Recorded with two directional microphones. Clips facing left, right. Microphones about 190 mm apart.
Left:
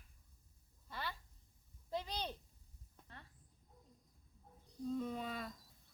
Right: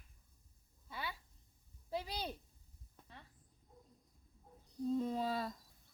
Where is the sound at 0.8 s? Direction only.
5° right (ahead or behind).